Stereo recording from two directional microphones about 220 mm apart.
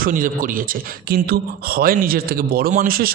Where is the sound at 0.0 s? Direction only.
40° right (ahead or behind).